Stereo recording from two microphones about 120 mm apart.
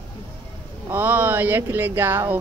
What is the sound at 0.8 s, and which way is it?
Speech, 15° right (ahead or behind).